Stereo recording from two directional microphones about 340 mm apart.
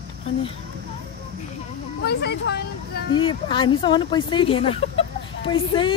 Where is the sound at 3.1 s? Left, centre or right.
Centre.